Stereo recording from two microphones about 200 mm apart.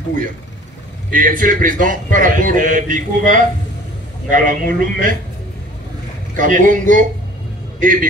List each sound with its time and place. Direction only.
1.1 s a man's voice: 45° right (ahead or behind)
6.3 s a man's voice: 40° right (ahead or behind)